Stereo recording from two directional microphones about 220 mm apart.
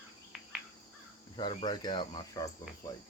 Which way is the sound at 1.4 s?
20° left (ahead or behind).